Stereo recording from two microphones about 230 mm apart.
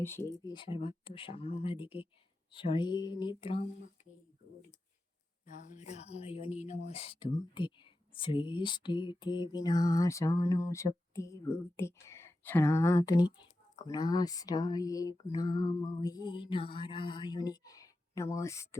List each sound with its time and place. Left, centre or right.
0.0 s speech: centre
5.7 s speech: left; by 18.8 s centre